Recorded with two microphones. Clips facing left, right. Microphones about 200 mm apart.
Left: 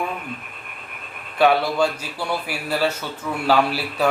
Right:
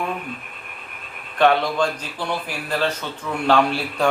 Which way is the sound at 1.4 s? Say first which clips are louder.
Even; 5° left (ahead or behind).